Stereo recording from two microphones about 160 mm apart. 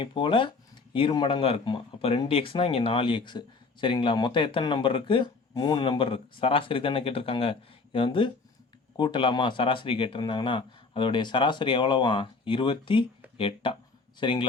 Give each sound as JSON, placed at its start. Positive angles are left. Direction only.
{"t": 0.0, "sound": "speech", "side_deg": 35}